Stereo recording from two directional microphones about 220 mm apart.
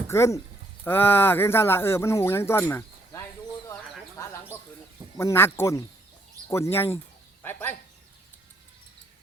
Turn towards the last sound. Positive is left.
turn(degrees=10)  # may be behind; listen again after turning